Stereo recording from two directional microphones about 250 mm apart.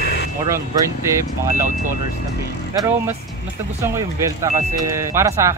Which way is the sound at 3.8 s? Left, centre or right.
Centre.